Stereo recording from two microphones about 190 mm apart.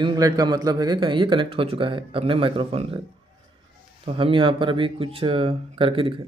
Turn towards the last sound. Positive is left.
turn(degrees=-30)  # may be behind; listen again after turning